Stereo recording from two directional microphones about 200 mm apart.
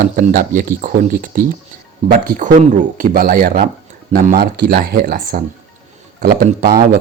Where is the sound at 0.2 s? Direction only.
45° right (ahead or behind).